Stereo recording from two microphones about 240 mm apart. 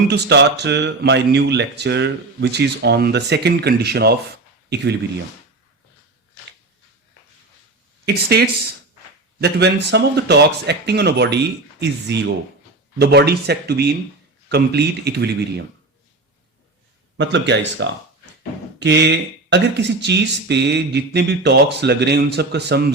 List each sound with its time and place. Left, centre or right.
0.1 s speech: right
8.0 s speech: right
17.2 s speech: right